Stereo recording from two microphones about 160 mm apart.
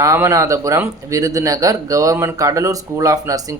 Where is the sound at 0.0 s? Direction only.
20° right (ahead or behind).